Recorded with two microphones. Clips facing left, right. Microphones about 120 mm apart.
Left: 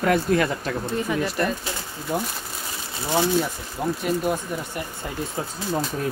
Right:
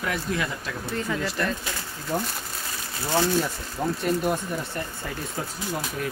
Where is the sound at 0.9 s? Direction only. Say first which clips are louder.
Left 2 dB; 15° left (ahead or behind).